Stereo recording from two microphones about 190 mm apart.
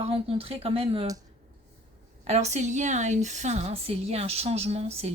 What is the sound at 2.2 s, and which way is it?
A woman's voice, 35° right (ahead or behind).